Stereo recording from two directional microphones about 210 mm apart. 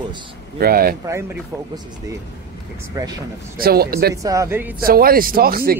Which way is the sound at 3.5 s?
45° right (ahead or behind).